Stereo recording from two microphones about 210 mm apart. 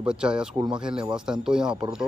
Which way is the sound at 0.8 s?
5° right (ahead or behind).